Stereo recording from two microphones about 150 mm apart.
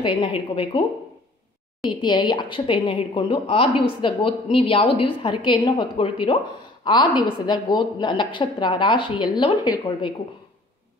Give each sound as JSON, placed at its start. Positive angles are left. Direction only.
{"t": 0.0, "sound": "a woman's voice", "side_deg": 35}
{"t": 1.9, "sound": "a woman's voice", "side_deg": 30}